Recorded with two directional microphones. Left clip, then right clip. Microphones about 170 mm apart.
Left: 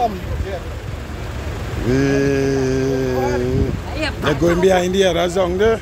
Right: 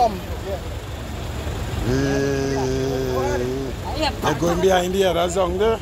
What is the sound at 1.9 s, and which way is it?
Sheep, 60° left (ahead or behind).